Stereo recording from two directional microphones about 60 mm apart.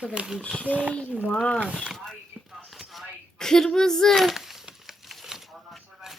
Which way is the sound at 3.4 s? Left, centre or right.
Centre.